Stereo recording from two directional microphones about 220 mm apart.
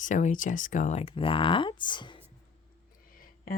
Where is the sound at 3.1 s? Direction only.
40° left (ahead or behind).